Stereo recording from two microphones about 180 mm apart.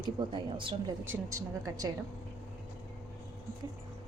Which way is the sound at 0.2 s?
25° right (ahead or behind).